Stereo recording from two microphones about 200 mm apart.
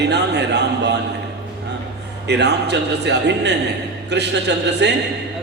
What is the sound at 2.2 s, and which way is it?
A man's voice, 55° right (ahead or behind).